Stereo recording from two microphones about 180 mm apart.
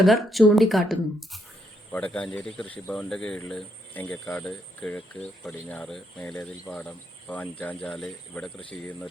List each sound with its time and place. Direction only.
0.0 s speech: centre (ahead or behind)